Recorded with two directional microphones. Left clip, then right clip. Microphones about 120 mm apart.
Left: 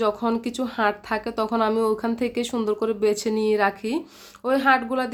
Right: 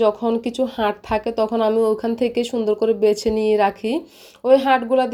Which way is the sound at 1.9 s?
10° right (ahead or behind).